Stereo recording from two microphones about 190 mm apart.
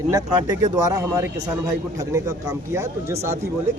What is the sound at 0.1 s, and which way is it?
Speech, 15° right (ahead or behind).